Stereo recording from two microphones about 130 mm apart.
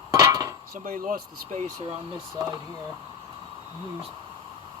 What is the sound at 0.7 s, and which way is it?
Speech, 90° right.